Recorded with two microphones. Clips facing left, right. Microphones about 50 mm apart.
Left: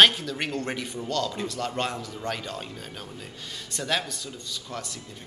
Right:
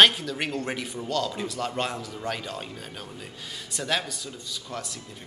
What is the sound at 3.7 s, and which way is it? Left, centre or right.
Speech, centre.